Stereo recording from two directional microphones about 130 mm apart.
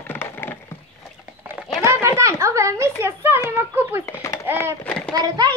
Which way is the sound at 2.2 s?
25° right (ahead or behind).